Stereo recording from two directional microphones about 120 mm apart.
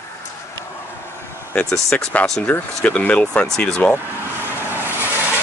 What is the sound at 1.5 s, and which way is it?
Speech, 5° left (ahead or behind).